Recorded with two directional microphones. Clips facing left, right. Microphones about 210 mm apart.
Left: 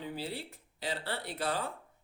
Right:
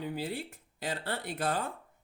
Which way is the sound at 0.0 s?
50° right (ahead or behind).